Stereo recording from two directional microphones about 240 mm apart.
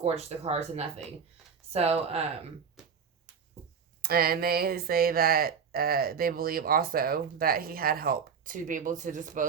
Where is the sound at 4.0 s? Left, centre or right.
Right.